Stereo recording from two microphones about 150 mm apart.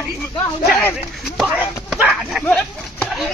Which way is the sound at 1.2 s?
5° right (ahead or behind).